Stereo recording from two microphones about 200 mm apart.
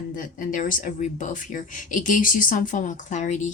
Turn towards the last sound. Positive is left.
turn(degrees=40)  # may be behind; listen again after turning